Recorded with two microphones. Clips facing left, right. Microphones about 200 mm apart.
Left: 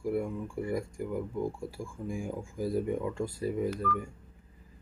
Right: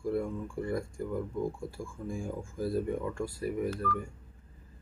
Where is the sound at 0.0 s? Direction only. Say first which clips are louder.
Even; 10° left (ahead or behind).